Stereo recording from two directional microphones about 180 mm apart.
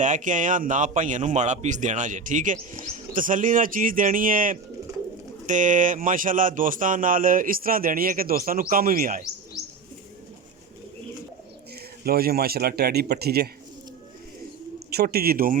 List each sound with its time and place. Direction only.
0.0 s speech: 45° right (ahead or behind)
12.0 s speech: 55° right (ahead or behind)
14.8 s speech: 60° right (ahead or behind)